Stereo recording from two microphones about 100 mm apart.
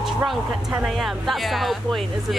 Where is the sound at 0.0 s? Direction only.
5° right (ahead or behind).